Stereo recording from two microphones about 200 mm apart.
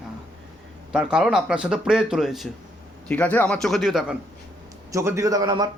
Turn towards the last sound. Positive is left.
turn(degrees=-20)  # may be behind; listen again after turning